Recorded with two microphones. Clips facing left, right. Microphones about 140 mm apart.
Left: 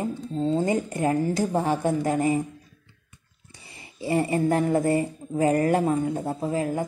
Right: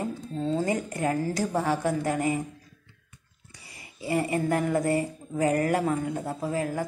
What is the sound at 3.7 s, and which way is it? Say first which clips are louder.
A woman's voice: left 3 dB; 25° left (ahead or behind).